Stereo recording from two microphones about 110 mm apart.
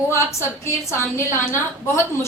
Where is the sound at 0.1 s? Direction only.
25° left (ahead or behind).